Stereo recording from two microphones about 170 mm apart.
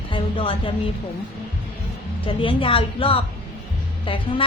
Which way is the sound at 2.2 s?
30° left (ahead or behind).